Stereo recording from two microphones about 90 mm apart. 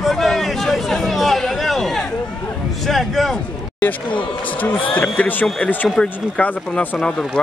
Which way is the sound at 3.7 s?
20° left (ahead or behind).